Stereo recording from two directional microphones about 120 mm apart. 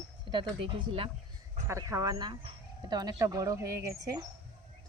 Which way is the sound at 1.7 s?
25° right (ahead or behind).